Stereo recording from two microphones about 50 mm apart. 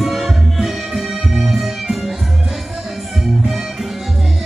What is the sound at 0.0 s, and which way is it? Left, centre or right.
Music, centre.